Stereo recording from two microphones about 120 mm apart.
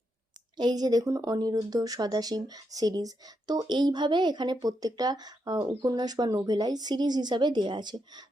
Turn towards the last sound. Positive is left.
turn(degrees=-40)  # may be behind; listen again after turning